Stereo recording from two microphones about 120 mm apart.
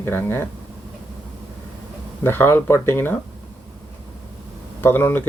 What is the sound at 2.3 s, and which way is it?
Speech, 20° left (ahead or behind).